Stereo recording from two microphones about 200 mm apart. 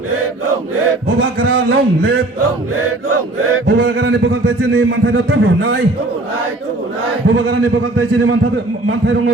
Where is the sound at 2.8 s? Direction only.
90° right.